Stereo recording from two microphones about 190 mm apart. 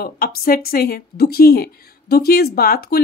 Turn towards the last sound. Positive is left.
turn(degrees=55)  # may be behind; listen again after turning